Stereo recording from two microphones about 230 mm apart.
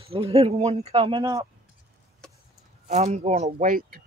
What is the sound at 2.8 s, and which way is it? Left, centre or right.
Speech, right.